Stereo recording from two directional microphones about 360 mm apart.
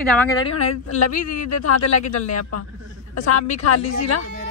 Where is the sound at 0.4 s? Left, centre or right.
Left.